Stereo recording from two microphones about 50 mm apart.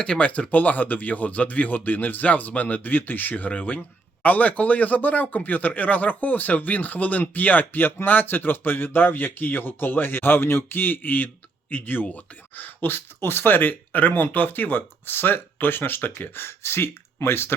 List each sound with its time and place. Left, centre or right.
0.0 s speech: left
16.4 s speech: left